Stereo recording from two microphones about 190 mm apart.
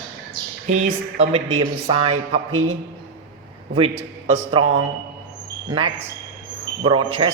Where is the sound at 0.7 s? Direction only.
35° right (ahead or behind).